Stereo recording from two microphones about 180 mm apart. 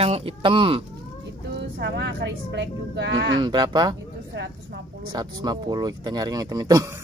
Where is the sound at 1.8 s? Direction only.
70° right (ahead or behind).